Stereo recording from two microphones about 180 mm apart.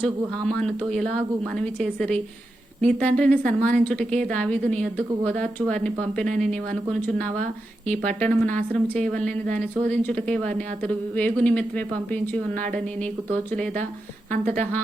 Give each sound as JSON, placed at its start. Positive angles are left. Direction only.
{"t": 0.4, "sound": "a woman's voice", "side_deg": 5}
{"t": 12.5, "sound": "speech", "side_deg": -45}
{"t": 14.3, "sound": "a woman's voice", "side_deg": -40}